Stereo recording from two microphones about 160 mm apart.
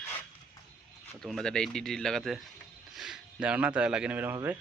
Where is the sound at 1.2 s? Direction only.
5° left (ahead or behind); by 4.6 s 15° right (ahead or behind).